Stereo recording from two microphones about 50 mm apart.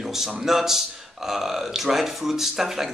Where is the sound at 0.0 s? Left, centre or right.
Centre.